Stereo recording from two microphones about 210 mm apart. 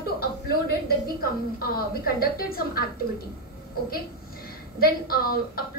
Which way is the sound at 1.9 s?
45° left (ahead or behind).